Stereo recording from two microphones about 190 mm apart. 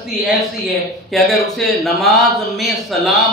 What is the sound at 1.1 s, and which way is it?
Speech, centre (ahead or behind).